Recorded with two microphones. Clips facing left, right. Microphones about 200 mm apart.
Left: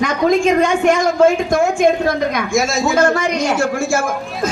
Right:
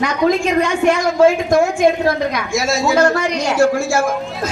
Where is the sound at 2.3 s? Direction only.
50° left (ahead or behind).